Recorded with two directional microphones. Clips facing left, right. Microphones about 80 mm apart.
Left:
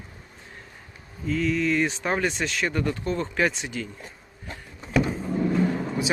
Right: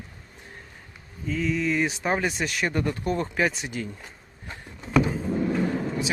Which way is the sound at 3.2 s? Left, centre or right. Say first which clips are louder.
Left 1 dB; centre.